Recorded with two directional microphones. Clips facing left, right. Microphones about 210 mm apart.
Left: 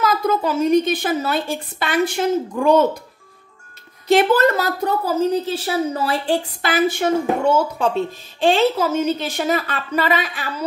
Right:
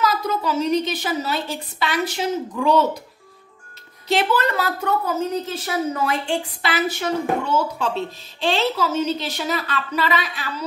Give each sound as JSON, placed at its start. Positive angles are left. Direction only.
{"t": 0.0, "sound": "a woman's voice", "side_deg": 50}
{"t": 4.1, "sound": "a woman's voice", "side_deg": 50}